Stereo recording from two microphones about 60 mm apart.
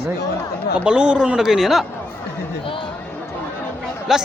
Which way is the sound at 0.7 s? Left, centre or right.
Centre.